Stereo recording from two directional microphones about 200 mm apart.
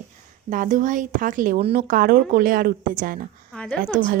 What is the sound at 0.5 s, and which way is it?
A woman's voice, 40° right (ahead or behind).